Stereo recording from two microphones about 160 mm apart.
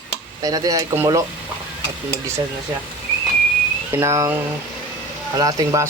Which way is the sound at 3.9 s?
20° right (ahead or behind).